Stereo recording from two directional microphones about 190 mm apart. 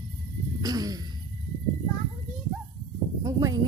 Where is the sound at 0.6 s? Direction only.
20° right (ahead or behind).